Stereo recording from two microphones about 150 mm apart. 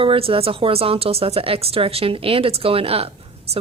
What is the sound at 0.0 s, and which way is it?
Speech, 40° right (ahead or behind).